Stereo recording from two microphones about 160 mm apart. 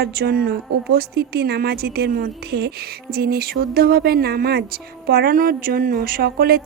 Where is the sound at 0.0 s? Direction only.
80° right.